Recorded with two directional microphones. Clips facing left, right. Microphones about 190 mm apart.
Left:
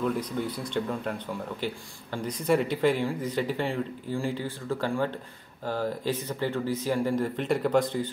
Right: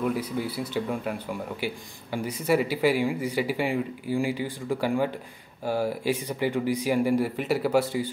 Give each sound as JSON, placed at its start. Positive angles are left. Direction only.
{"t": 0.0, "sound": "speech", "side_deg": -5}